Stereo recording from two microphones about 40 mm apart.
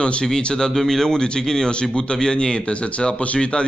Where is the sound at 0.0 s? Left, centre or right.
Left.